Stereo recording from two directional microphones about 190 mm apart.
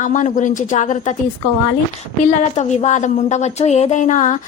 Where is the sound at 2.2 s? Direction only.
35° left (ahead or behind).